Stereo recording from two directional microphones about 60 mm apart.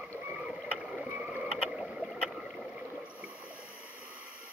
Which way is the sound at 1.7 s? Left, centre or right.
Centre.